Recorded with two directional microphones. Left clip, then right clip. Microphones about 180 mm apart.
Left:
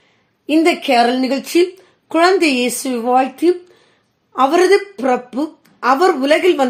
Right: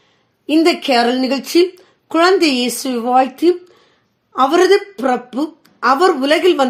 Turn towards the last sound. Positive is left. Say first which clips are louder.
# even
turn(degrees=-20)  # may be behind; listen again after turning